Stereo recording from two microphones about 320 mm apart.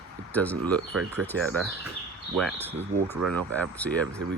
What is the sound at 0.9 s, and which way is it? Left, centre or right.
Speech, right.